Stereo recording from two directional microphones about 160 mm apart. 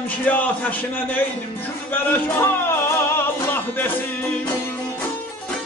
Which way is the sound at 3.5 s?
10° left (ahead or behind).